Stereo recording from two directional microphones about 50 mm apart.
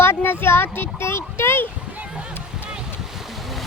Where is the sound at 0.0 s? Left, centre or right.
Left.